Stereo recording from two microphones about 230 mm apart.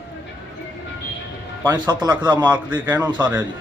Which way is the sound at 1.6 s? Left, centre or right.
Centre.